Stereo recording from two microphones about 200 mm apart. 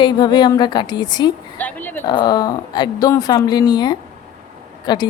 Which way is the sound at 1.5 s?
10° left (ahead or behind).